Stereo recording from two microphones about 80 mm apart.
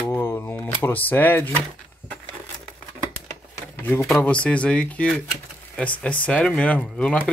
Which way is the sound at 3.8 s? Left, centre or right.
Left.